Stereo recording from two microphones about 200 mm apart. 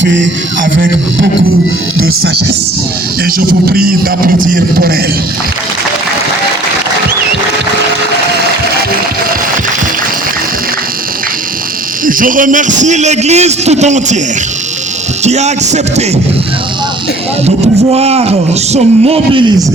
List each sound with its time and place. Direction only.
0.0 s a sound: 65° right (ahead or behind)
0.6 s a man's voice: 45° right (ahead or behind)
12.0 s a man's voice: 45° right (ahead or behind)
15.2 s a man's voice: 35° right (ahead or behind)
17.9 s a man's voice: 30° right (ahead or behind)